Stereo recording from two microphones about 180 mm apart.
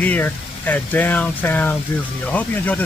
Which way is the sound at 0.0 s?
10° left (ahead or behind).